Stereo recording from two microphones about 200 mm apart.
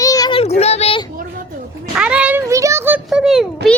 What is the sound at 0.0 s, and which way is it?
Child singing, 20° left (ahead or behind).